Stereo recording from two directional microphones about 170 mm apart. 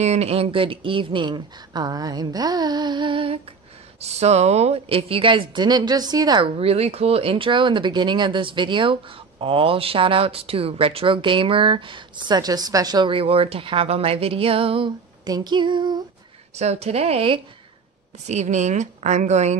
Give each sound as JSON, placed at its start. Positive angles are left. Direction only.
{"t": 0.0, "sound": "speech", "side_deg": -40}
{"t": 16.5, "sound": "a woman's voice", "side_deg": -40}